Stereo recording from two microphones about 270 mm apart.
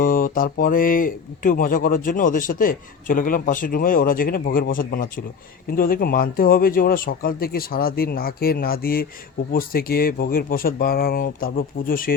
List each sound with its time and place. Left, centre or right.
0.0 s speech: left